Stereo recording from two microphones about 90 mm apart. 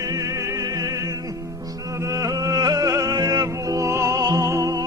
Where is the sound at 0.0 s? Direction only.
40° right (ahead or behind).